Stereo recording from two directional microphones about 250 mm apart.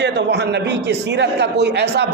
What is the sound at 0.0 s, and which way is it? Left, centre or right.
A man's voice, right.